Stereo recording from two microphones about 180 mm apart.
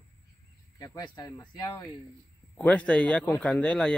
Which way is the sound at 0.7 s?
20° left (ahead or behind).